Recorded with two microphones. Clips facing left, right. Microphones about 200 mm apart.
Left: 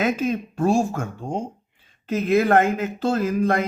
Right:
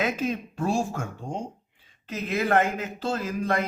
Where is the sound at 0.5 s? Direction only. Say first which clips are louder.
Left 6 dB; 45° left (ahead or behind).